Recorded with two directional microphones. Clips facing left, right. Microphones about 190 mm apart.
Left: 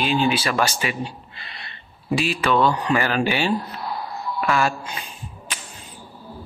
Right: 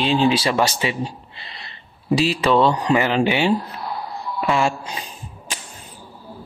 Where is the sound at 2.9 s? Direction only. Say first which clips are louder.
Right 3 dB; 20° right (ahead or behind).